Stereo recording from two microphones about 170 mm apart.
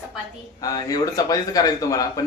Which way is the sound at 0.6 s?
20° left (ahead or behind).